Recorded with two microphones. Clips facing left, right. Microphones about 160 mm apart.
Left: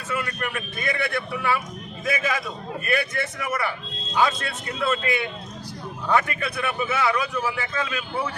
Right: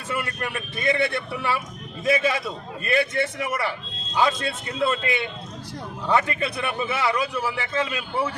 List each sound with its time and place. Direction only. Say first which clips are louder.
0.3 s speech: even; 25° right (ahead or behind)